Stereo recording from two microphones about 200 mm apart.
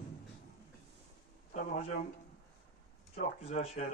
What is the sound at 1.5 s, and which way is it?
Speech, 35° left (ahead or behind).